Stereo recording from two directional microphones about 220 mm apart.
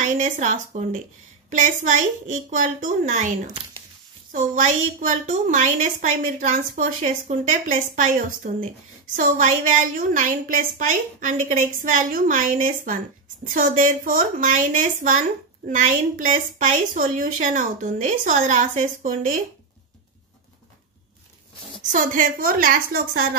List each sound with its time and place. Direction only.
0.2 s a woman's voice: 35° right (ahead or behind)
21.9 s a woman's voice: 35° right (ahead or behind)